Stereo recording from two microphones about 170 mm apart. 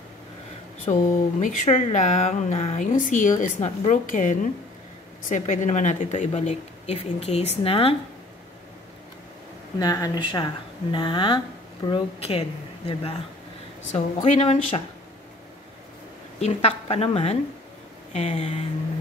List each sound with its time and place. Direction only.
0.9 s a woman's voice: 35° left (ahead or behind)
1.4 s a woman's voice: 45° left (ahead or behind)
9.8 s speech: 20° left (ahead or behind); by 14.6 s 40° left (ahead or behind)
16.3 s a woman's voice: 40° left (ahead or behind)